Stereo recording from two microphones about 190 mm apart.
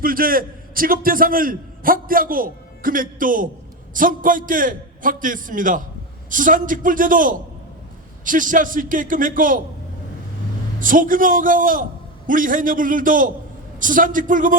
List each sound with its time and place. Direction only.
0.0 s a man's voice: 50° right (ahead or behind)
10.8 s a man's voice: 45° right (ahead or behind)